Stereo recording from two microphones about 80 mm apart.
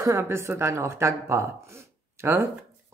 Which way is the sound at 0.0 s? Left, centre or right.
Right.